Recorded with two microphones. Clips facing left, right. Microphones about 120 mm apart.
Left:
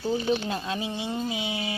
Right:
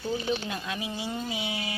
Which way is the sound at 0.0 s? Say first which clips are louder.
Left 4 dB; 30° left (ahead or behind).